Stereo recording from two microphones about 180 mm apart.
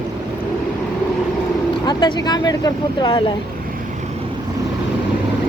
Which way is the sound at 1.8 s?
25° left (ahead or behind).